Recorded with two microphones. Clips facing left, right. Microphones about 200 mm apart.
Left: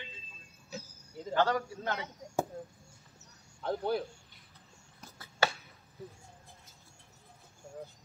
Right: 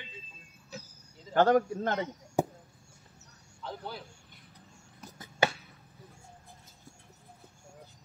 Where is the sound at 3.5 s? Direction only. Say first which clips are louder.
Left 9 dB; 55° left (ahead or behind).